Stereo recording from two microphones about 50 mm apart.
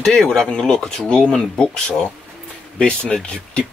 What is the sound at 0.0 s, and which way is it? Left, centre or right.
Speech, centre.